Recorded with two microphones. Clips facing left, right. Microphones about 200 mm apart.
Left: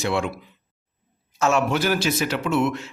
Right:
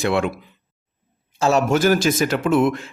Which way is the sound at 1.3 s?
35° right (ahead or behind).